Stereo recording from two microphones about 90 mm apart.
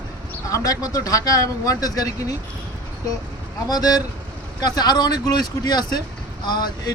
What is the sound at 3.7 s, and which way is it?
Speech, 45° left (ahead or behind).